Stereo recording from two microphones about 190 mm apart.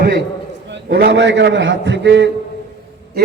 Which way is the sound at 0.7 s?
65° right (ahead or behind).